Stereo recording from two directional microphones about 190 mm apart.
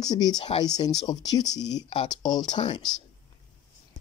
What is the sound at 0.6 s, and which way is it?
Speech, 20° left (ahead or behind).